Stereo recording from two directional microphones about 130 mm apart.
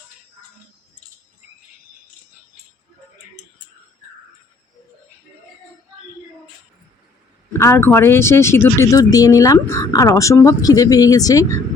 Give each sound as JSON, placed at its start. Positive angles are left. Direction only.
{"t": 7.6, "sound": "speech", "side_deg": 20}